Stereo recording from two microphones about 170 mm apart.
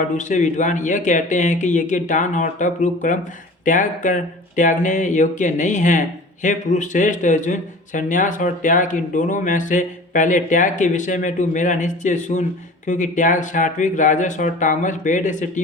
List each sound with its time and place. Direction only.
0.2 s speech: 45° left (ahead or behind)